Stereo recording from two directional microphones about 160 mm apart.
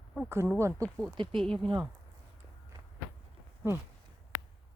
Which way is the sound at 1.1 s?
30° right (ahead or behind).